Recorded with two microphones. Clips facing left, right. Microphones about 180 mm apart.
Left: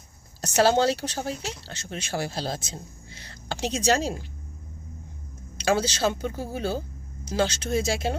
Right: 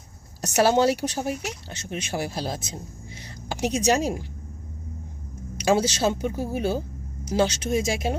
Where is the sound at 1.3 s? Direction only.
25° left (ahead or behind).